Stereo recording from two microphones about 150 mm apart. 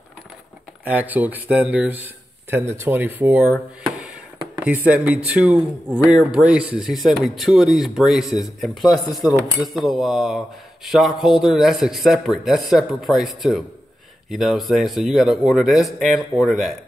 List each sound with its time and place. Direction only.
0.8 s speech: 10° right (ahead or behind)